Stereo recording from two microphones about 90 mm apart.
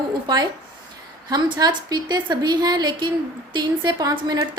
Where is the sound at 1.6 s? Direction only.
50° right (ahead or behind).